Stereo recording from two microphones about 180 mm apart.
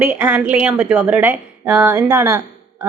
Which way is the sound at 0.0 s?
10° right (ahead or behind).